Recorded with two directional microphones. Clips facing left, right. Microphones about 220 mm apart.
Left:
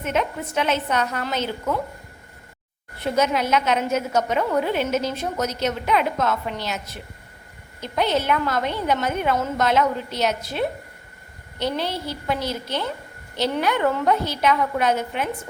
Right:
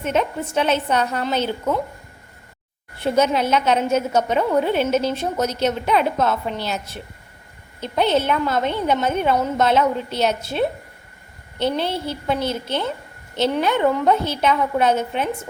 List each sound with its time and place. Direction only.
0.0 s a woman's voice: 30° right (ahead or behind)
3.0 s a woman's voice: 30° right (ahead or behind)
11.6 s a woman's voice: 25° right (ahead or behind)